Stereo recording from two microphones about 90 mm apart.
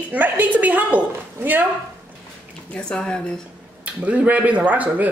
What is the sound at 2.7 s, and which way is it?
Speech, 10° left (ahead or behind).